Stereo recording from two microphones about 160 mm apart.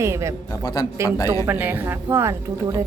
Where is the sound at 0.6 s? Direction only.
25° left (ahead or behind).